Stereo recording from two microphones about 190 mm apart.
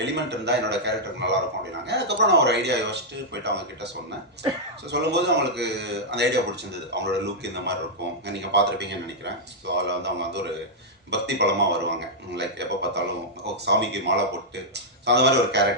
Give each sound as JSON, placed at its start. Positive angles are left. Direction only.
{"t": 0.0, "sound": "speech", "side_deg": -65}
{"t": 4.9, "sound": "speech", "side_deg": -65}